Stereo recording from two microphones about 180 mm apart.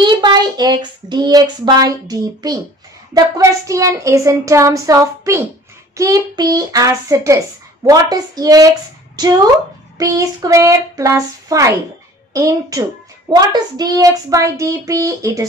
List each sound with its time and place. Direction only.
0.0 s speech: 25° right (ahead or behind)
3.2 s child singing: 15° right (ahead or behind)
5.9 s a child's voice: 20° right (ahead or behind)
9.9 s child singing: 20° right (ahead or behind)
12.4 s a child's voice: 20° right (ahead or behind)